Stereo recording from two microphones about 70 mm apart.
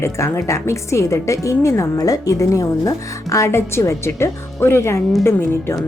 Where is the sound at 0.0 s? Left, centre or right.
Left.